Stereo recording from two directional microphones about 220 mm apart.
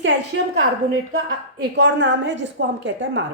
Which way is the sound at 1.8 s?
55° right (ahead or behind).